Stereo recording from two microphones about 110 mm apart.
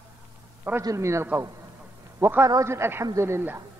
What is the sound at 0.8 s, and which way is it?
A man's voice, 30° right (ahead or behind).